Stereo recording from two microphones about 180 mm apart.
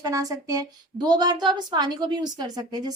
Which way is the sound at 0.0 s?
20° right (ahead or behind).